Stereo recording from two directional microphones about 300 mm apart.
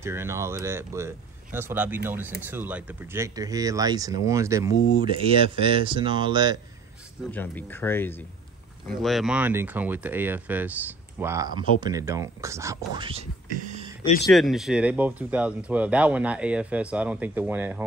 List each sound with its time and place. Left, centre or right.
0.0 s speech: centre
7.2 s speech: centre; by 13.9 s right
14.3 s speech: centre